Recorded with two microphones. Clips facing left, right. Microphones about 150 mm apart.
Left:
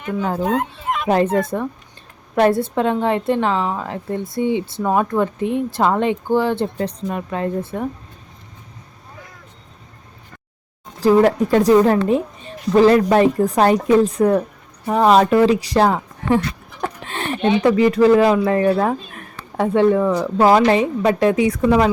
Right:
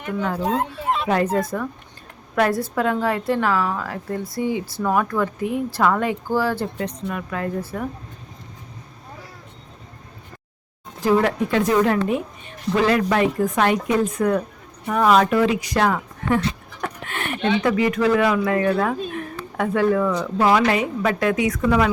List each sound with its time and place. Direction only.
0.2 s a woman's voice: 30° left (ahead or behind)
11.0 s a woman's voice: 35° left (ahead or behind)
16.8 s a sound: 30° left (ahead or behind)
17.6 s a woman's voice: 30° left (ahead or behind)